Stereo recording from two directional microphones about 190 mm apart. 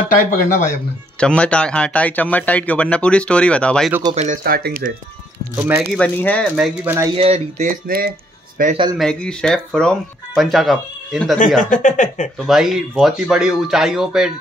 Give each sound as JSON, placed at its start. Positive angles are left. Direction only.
{"t": 0.2, "sound": "speech", "side_deg": 50}
{"t": 1.2, "sound": "speech", "side_deg": 5}
{"t": 4.1, "sound": "speech", "side_deg": -40}
{"t": 5.6, "sound": "speech", "side_deg": -10}
{"t": 5.9, "sound": "speech", "side_deg": 5}
{"t": 6.5, "sound": "speech", "side_deg": -5}
{"t": 7.2, "sound": "speech", "side_deg": -35}
{"t": 8.6, "sound": "speech", "side_deg": -50}
{"t": 8.9, "sound": "speech", "side_deg": 5}
{"t": 11.3, "sound": "speech", "side_deg": 45}
{"t": 12.4, "sound": "speech", "side_deg": 0}